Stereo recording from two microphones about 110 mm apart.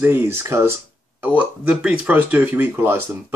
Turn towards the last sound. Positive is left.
turn(degrees=-20)  # may be behind; listen again after turning